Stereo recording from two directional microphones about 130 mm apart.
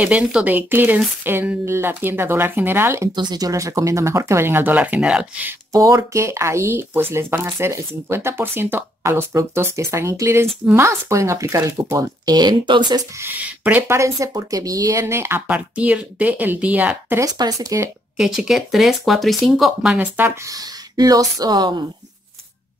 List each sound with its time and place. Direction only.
0.0 s speech: 10° right (ahead or behind)
3.2 s speech: 30° right (ahead or behind); by 5.5 s 5° right (ahead or behind)
5.7 s speech: 25° right (ahead or behind)
13.2 s speech: 15° right (ahead or behind)
17.2 s speech: 25° right (ahead or behind)
18.1 s speech: 5° right (ahead or behind)
20.9 s speech: 30° right (ahead or behind)